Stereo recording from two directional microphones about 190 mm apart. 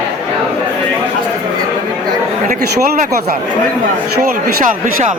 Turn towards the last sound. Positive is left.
turn(degrees=-45)  # may be behind; listen again after turning